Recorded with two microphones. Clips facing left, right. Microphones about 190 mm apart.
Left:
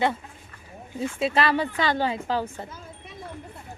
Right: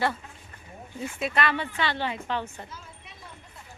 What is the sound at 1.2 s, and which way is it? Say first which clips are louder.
A woman's voice: left 4 dB; 30° left (ahead or behind).